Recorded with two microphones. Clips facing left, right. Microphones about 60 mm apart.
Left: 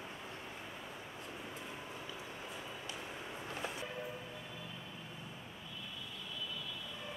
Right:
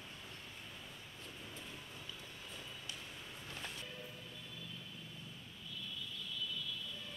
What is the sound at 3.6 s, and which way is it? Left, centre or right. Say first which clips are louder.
Music: left 6 dB; centre.